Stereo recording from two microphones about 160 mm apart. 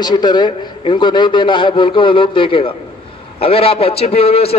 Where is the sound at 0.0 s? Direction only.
25° left (ahead or behind).